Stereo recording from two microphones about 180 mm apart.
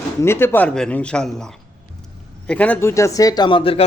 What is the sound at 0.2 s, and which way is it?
A man's voice, 15° left (ahead or behind).